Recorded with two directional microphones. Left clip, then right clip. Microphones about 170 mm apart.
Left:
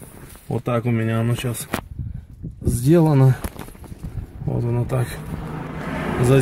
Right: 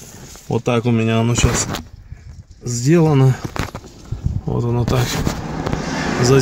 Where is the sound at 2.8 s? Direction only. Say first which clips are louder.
Right 2 dB; 5° left (ahead or behind).